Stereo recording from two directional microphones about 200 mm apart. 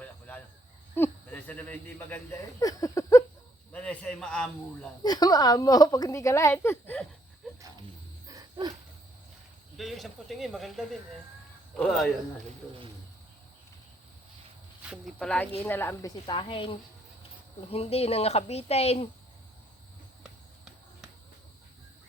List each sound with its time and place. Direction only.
0.0 s a sound: 10° left (ahead or behind)
0.9 s speech: 10° left (ahead or behind)
5.0 s a woman's voice: 20° left (ahead or behind)
7.4 s a sound: centre (ahead or behind)
8.3 s dog: 20° right (ahead or behind)
9.7 s speech: centre (ahead or behind)
14.8 s a woman's voice: 5° right (ahead or behind); by 19.0 s 30° left (ahead or behind)